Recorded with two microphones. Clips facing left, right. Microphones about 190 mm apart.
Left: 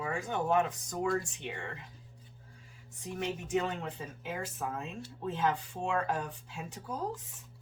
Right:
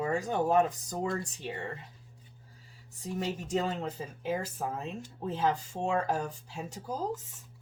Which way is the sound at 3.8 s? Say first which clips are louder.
Right 4 dB; 35° right (ahead or behind).